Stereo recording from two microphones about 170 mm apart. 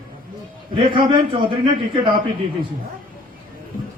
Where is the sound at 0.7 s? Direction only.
30° right (ahead or behind).